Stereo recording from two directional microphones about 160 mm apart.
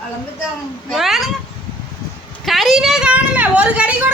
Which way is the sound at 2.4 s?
Centre (ahead or behind).